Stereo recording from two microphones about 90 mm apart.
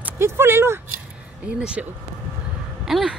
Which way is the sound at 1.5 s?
10° right (ahead or behind).